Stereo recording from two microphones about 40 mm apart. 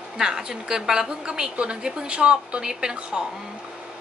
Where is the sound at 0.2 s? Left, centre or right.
Centre.